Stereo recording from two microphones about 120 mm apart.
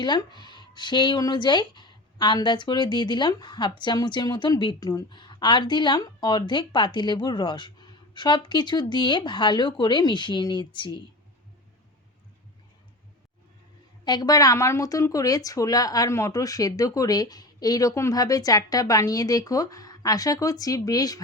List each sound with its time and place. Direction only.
0.0 s speech: 35° left (ahead or behind)
14.0 s speech: 35° left (ahead or behind)